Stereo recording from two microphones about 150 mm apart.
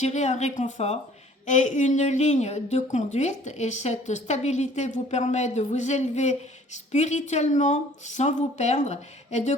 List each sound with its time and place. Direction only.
0.0 s a woman's voice: 50° left (ahead or behind)